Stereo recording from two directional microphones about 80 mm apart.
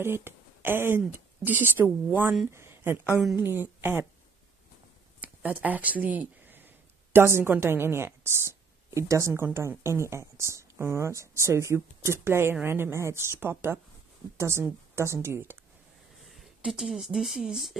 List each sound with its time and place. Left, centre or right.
0.0 s a woman's voice: right
2.5 s a sound: right
3.3 s a woman's voice: right
5.2 s a sound: centre
7.6 s a woman's voice: right
16.3 s speech: centre